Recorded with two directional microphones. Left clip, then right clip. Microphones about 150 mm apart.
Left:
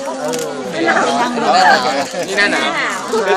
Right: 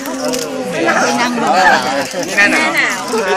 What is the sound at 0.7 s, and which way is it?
Chatter, 45° left (ahead or behind).